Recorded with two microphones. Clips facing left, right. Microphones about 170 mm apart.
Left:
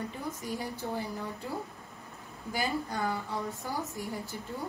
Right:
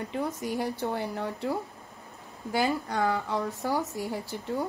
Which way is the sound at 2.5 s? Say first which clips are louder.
Right 5 dB; 75° right (ahead or behind).